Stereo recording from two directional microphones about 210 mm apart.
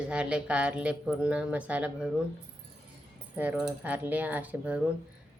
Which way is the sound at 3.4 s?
5° right (ahead or behind).